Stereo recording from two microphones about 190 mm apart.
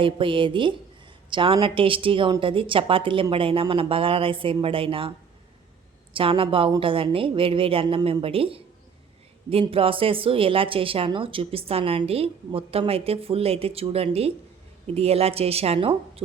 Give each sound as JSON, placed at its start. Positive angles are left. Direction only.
{"t": 0.0, "sound": "a woman's voice", "side_deg": -25}
{"t": 6.1, "sound": "a woman's voice", "side_deg": -30}